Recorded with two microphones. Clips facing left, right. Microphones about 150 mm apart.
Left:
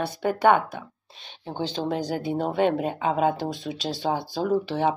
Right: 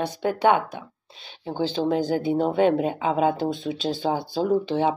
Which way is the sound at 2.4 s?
35° right (ahead or behind).